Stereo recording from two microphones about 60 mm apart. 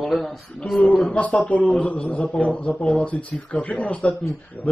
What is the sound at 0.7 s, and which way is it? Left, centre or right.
Speech, centre.